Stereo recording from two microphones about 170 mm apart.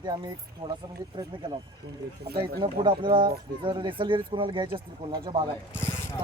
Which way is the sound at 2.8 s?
25° right (ahead or behind).